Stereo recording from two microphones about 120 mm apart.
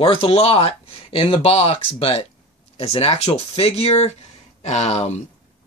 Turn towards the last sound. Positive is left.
turn(degrees=70)  # may be behind; listen again after turning